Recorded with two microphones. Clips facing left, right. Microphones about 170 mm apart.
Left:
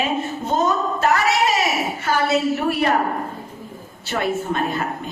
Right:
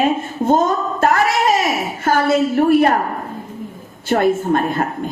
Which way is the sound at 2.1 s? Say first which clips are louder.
Right 4 dB; 50° right (ahead or behind).